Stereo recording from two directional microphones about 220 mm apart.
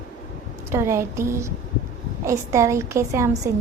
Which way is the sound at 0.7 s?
10° right (ahead or behind).